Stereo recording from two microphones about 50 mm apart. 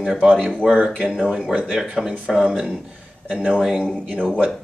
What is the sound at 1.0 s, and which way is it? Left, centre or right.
Speech, right.